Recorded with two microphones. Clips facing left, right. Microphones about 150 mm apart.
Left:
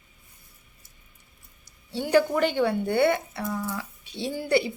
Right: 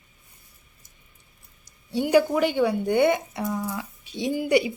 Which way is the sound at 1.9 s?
15° right (ahead or behind).